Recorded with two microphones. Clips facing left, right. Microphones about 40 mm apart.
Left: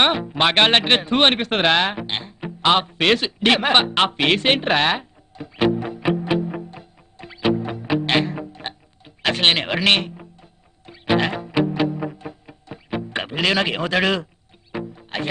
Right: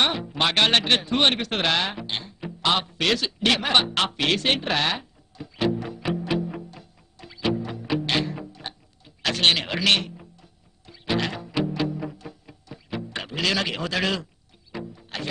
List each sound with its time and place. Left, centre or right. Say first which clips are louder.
0.0 s music: left 5 dB; left